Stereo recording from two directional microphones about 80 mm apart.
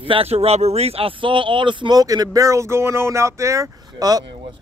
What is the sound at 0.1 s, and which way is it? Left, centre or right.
Speech, right.